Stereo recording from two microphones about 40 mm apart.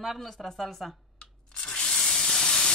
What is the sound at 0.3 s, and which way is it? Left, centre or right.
Speech, centre.